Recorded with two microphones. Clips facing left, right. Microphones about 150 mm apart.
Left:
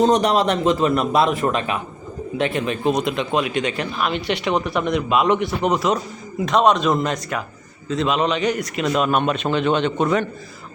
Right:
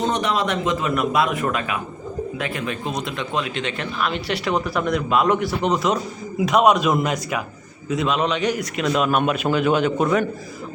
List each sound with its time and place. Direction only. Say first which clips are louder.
0.0 s a man's voice: left 6 dB; 40° left (ahead or behind); by 4.1 s 15° left (ahead or behind)
4.1 s a man's voice: left 2 dB; centre (ahead or behind)
5.3 s a man's voice: left 1 dB; centre (ahead or behind)